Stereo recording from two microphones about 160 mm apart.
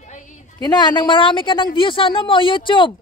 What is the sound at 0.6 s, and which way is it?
A woman's voice, 25° left (ahead or behind).